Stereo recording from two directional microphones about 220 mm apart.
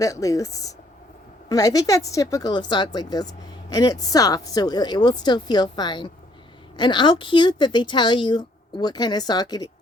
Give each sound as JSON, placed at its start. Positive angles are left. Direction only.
{"t": 0.0, "sound": "a woman's voice", "side_deg": 15}